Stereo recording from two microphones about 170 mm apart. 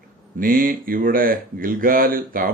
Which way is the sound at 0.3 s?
55° right (ahead or behind).